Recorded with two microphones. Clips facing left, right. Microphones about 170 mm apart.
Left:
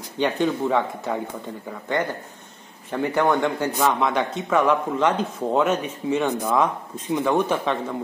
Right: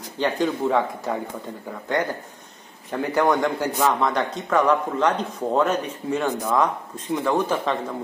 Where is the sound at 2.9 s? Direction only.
Centre (ahead or behind).